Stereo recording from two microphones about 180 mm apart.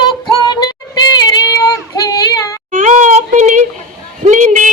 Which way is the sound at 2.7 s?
45° right (ahead or behind).